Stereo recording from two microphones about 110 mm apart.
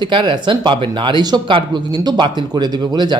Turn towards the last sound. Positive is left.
turn(degrees=-40)  # may be behind; listen again after turning